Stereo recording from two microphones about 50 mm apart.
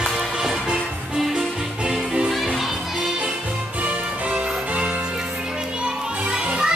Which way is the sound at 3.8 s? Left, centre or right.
Right.